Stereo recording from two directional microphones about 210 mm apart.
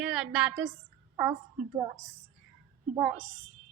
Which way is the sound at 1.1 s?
10° right (ahead or behind).